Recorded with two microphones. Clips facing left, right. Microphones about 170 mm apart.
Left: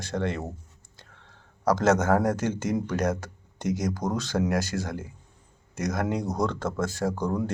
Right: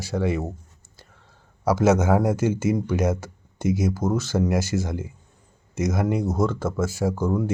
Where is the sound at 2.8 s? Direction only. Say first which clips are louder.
Right 3 dB; 5° right (ahead or behind).